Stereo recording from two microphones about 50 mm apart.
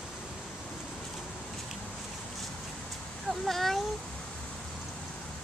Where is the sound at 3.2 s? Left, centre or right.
Centre.